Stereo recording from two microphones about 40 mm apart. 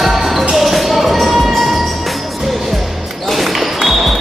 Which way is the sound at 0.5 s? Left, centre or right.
Centre.